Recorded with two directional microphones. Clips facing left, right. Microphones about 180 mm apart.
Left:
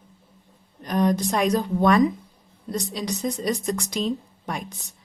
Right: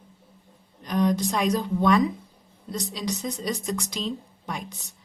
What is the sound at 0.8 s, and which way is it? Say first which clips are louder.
A woman's voice: left 2 dB; 50° left (ahead or behind).